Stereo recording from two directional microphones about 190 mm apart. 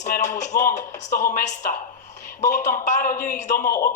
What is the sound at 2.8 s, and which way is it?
Speech, 40° left (ahead or behind).